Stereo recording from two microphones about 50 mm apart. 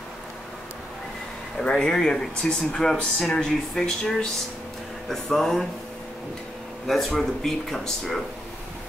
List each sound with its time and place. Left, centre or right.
1.6 s speech: centre
6.9 s speech: centre